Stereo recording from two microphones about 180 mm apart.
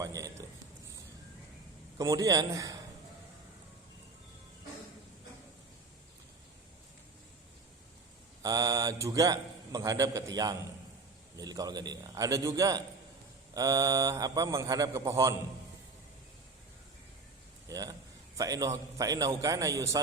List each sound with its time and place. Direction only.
0.0 s a sound: 20° right (ahead or behind)
2.0 s a man's voice: 20° right (ahead or behind)
8.4 s a man's voice: 20° right (ahead or behind)
17.7 s a man's voice: 20° right (ahead or behind)